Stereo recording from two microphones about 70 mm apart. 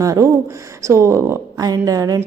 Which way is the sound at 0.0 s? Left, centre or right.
Right.